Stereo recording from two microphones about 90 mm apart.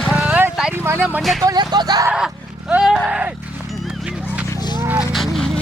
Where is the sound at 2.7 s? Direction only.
5° right (ahead or behind).